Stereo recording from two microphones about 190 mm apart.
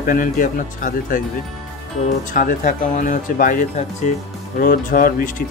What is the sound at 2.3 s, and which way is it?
Speech, 45° left (ahead or behind).